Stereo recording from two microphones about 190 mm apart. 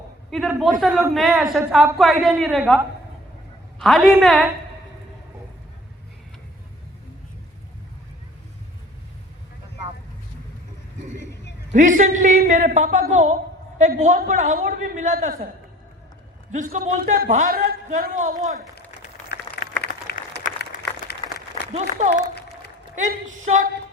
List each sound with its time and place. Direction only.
0.3 s a woman's voice: centre (ahead or behind)
3.8 s a woman's voice: centre (ahead or behind)
11.7 s a man's voice: 40° right (ahead or behind)
16.5 s a man's voice: 40° right (ahead or behind)
19.8 s a sound: 50° left (ahead or behind)
21.1 s applause: 60° left (ahead or behind)
21.7 s a man's voice: 35° right (ahead or behind)